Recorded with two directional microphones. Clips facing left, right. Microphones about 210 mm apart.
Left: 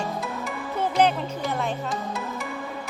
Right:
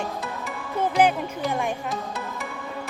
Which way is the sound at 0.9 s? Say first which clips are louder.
Right 1 dB; 5° right (ahead or behind).